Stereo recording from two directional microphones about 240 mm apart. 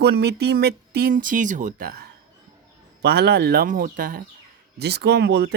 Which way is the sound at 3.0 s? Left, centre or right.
Right.